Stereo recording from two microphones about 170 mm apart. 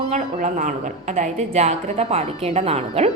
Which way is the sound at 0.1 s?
45° right (ahead or behind).